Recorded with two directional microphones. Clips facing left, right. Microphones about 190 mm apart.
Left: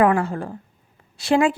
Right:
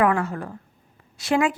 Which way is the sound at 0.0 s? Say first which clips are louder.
Left 3 dB; 30° left (ahead or behind).